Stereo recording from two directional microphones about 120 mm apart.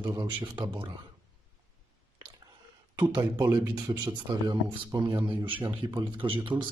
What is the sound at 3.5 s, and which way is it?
Speech, 20° right (ahead or behind).